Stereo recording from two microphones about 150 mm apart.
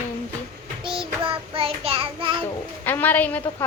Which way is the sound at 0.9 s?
35° right (ahead or behind).